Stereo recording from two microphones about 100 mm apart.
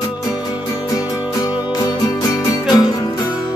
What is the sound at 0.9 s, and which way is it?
Music, 35° left (ahead or behind).